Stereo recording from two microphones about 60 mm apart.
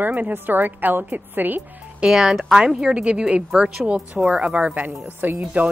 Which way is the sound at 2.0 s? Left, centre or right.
Centre.